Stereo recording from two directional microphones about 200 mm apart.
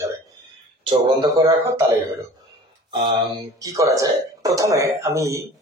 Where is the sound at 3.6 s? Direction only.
15° right (ahead or behind).